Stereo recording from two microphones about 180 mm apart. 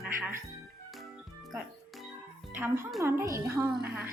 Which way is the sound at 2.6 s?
10° right (ahead or behind).